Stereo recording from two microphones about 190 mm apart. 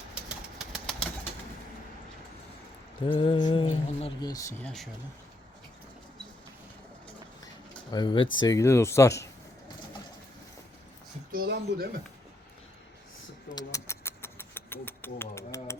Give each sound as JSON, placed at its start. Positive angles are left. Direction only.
{"t": 0.1, "sound": "bird flight", "side_deg": -5}
{"t": 3.0, "sound": "speech", "side_deg": 25}
{"t": 4.3, "sound": "speech", "side_deg": 15}
{"t": 4.6, "sound": "speech", "side_deg": 0}
{"t": 7.9, "sound": "speech", "side_deg": 20}
{"t": 11.3, "sound": "speech", "side_deg": -55}
{"t": 13.6, "sound": "a sound", "side_deg": 15}